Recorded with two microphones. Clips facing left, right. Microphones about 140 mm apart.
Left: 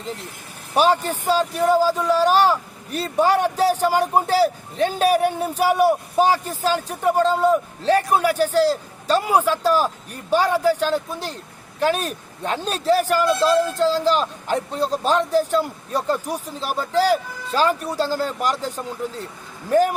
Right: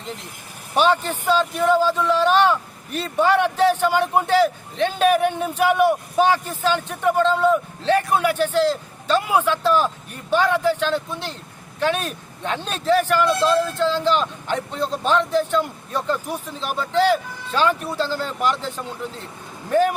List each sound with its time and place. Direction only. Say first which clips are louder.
0.8 s speech: left 1 dB; 40° left (ahead or behind)